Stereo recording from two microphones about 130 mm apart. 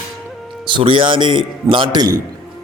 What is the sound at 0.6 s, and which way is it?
A man's voice, 40° right (ahead or behind).